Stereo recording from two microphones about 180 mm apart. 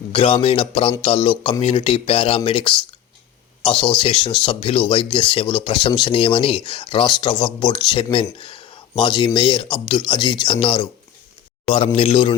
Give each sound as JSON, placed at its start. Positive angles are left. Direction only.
{"t": 0.1, "sound": "speech", "side_deg": 30}